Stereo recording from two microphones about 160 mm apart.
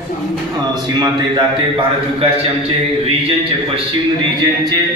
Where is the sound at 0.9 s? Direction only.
30° right (ahead or behind).